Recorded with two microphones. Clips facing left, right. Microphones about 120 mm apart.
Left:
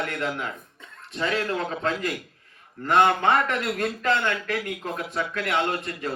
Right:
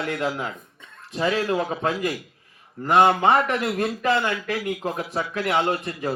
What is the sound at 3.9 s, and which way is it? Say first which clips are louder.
Speech: right 1 dB; 10° right (ahead or behind).